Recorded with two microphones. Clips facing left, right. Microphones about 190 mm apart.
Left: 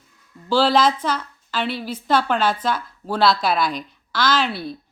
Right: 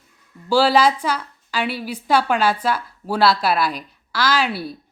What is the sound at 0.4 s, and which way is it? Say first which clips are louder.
A woman's voice: right 1 dB; 10° right (ahead or behind).